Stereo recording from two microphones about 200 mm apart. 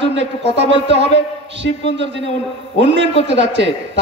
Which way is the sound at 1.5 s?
60° right (ahead or behind).